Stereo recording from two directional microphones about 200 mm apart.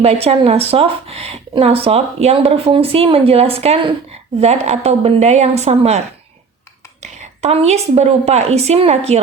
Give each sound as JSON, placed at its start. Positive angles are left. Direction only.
{"t": 0.0, "sound": "a woman's voice", "side_deg": -30}
{"t": 7.0, "sound": "a woman's voice", "side_deg": -35}